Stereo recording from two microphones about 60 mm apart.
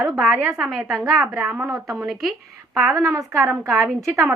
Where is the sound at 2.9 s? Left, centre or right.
Right.